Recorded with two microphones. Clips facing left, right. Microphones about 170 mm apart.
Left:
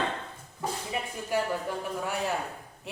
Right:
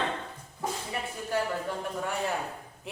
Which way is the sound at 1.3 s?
10° left (ahead or behind).